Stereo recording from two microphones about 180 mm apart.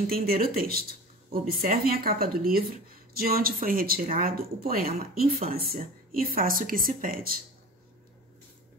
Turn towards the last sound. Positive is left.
turn(degrees=-55)  # may be behind; listen again after turning